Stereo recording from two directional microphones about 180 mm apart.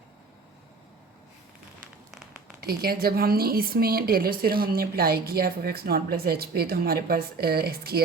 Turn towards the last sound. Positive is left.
turn(degrees=-60)  # may be behind; listen again after turning